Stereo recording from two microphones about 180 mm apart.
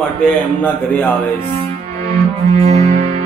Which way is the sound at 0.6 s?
10° left (ahead or behind).